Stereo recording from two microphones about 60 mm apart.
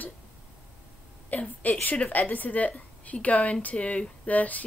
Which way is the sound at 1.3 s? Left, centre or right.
Left.